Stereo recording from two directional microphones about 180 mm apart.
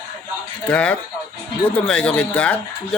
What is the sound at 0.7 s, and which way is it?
Speech, 5° left (ahead or behind).